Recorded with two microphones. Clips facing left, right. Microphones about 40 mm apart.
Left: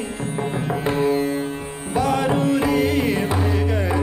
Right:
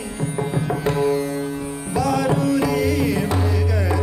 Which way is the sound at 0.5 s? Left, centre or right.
Left.